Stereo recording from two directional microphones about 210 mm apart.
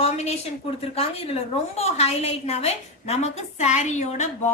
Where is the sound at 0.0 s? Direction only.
30° left (ahead or behind).